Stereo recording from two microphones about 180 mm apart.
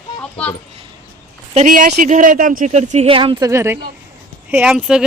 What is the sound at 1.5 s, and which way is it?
Speech, 45° right (ahead or behind).